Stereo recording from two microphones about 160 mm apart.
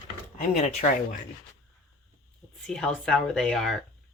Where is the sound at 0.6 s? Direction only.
45° left (ahead or behind).